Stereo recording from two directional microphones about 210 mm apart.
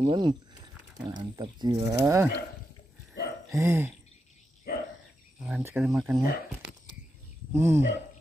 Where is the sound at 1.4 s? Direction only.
20° right (ahead or behind).